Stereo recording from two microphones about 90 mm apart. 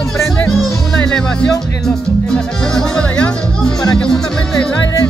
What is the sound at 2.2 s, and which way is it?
Speech, 5° left (ahead or behind).